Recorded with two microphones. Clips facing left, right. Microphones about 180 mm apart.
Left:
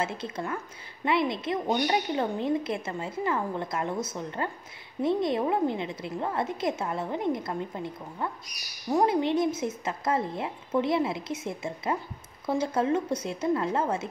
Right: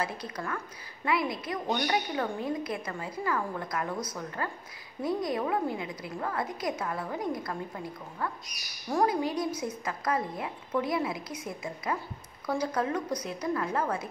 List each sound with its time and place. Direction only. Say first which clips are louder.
0.0 s a woman's voice: left 3 dB; 25° left (ahead or behind)